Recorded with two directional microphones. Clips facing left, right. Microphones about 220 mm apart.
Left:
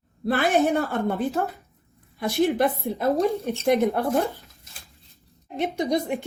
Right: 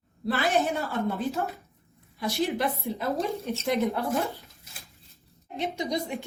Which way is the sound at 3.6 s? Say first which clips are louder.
Left 6 dB; 50° left (ahead or behind).